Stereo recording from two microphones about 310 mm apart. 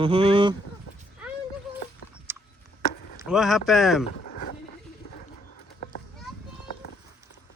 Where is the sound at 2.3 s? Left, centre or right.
Centre.